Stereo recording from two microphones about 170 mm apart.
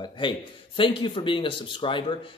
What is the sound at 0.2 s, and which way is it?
A man's voice, 30° left (ahead or behind).